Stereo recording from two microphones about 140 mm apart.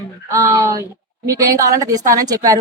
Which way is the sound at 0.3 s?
20° right (ahead or behind).